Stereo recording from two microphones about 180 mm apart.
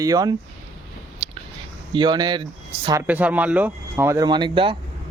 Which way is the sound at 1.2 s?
35° right (ahead or behind).